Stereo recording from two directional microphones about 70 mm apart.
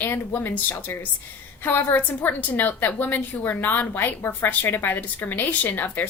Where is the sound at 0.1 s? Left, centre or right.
Left.